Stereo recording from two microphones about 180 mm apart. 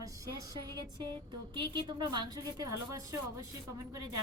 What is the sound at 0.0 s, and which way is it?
A woman's voice, 20° right (ahead or behind).